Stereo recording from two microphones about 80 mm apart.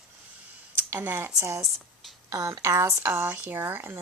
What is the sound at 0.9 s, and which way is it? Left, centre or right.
Speech, right.